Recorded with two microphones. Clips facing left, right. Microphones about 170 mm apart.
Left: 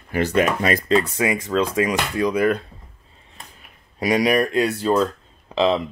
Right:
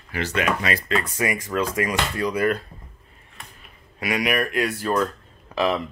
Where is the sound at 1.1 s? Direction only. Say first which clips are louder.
Left 4 dB; 20° left (ahead or behind).